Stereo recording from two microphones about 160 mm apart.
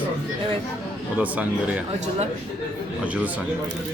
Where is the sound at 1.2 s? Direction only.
10° right (ahead or behind).